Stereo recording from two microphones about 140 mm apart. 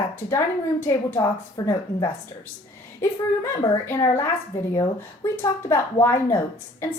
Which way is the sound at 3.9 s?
20° left (ahead or behind).